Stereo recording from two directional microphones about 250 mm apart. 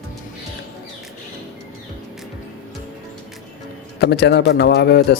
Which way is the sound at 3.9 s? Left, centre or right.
Left.